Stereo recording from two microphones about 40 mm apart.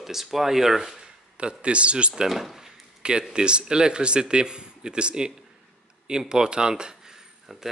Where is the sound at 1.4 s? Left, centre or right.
Right.